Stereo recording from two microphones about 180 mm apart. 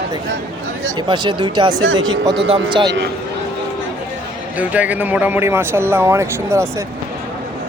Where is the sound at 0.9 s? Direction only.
25° right (ahead or behind).